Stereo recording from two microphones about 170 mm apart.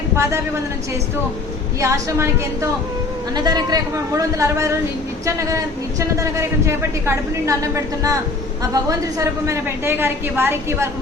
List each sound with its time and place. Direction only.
0.2 s a woman's voice: 15° right (ahead or behind)
1.8 s a woman's voice: 15° right (ahead or behind)